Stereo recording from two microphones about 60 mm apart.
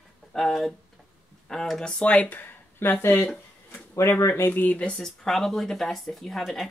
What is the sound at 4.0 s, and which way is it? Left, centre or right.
Speech, left.